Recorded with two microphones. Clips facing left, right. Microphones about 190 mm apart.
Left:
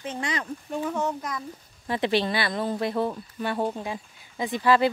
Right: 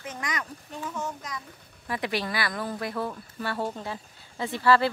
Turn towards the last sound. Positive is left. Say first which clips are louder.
# left 1 dB
turn(degrees=15)  # may be behind; listen again after turning